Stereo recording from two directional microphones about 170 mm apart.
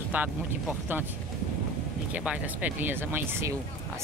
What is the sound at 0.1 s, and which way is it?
Speech, 10° right (ahead or behind).